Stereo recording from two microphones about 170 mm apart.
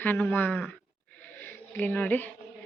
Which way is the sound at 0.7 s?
10° left (ahead or behind).